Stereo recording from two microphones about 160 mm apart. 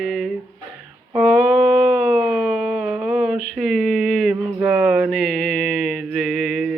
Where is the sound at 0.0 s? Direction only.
Centre (ahead or behind).